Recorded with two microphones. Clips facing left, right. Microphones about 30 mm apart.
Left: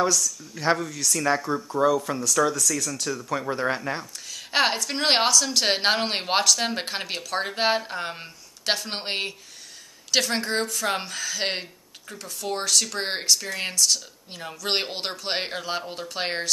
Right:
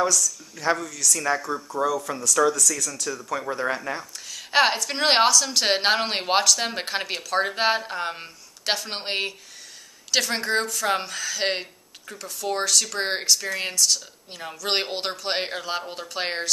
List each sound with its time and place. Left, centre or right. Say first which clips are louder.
0.0 s speech: even; centre
2.1 s speech: right 2 dB; centre
4.0 s speech: even; centre